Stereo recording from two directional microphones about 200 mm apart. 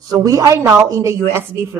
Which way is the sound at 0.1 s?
15° right (ahead or behind).